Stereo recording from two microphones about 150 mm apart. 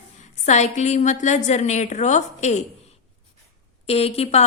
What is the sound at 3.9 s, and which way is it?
Speech, 40° left (ahead or behind).